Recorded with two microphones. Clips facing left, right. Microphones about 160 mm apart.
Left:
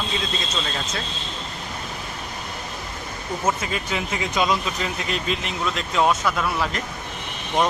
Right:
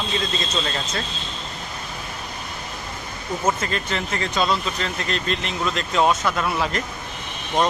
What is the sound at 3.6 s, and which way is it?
Speech, 5° left (ahead or behind).